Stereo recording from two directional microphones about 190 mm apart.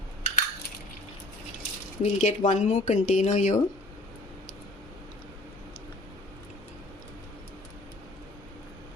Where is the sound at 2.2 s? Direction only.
40° left (ahead or behind).